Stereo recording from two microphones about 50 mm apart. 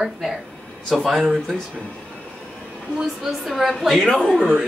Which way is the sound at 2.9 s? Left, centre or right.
Centre.